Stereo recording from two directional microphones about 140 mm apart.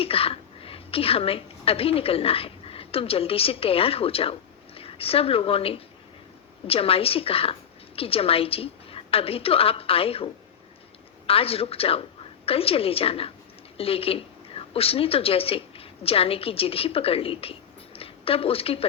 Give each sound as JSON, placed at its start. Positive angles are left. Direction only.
{"t": 0.0, "sound": "a woman's voice", "side_deg": 40}
{"t": 11.3, "sound": "a woman's voice", "side_deg": 45}